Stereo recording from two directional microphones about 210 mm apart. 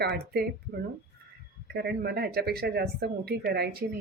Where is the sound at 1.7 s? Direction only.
50° right (ahead or behind).